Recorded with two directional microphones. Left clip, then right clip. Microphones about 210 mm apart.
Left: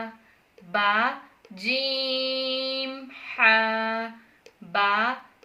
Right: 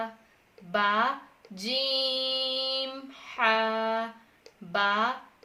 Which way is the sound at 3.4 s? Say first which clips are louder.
Left 5 dB; 50° right (ahead or behind).